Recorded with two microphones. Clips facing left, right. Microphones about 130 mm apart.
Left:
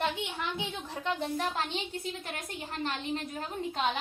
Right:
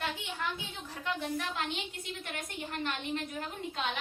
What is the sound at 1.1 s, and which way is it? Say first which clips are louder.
A woman's voice: left 2 dB; 35° left (ahead or behind).